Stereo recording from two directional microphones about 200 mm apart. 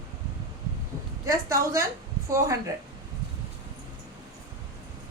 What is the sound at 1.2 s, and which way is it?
A woman's voice, 15° right (ahead or behind).